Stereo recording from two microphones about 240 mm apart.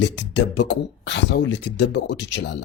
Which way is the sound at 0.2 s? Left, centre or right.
Left.